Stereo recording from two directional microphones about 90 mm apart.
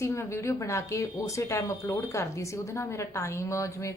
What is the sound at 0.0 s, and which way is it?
A woman's voice, 30° left (ahead or behind).